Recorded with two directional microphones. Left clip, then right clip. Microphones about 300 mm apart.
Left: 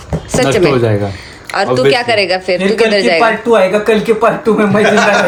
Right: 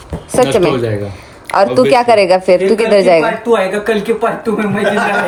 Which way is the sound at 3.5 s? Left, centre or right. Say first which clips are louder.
Left 2 dB; centre.